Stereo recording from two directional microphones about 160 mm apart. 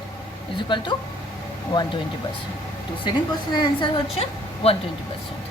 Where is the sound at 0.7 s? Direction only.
30° left (ahead or behind).